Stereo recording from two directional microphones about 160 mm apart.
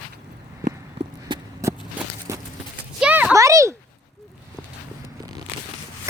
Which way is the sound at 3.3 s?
20° right (ahead or behind).